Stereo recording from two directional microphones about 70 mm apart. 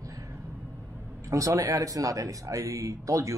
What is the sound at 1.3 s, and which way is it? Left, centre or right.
A man's voice, right.